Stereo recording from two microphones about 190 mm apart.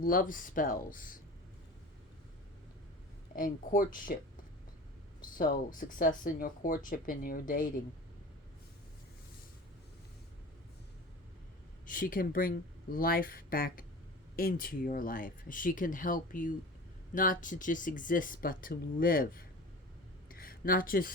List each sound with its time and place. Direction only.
0.0 s speech: 50° left (ahead or behind)
3.3 s speech: 45° left (ahead or behind)
5.2 s speech: 45° left (ahead or behind)
11.9 s speech: 45° left (ahead or behind)
20.2 s a sound: 50° left (ahead or behind)